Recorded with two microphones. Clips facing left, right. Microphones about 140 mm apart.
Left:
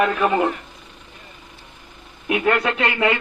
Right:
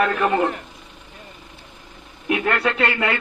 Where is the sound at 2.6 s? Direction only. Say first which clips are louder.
Left 1 dB; centre (ahead or behind).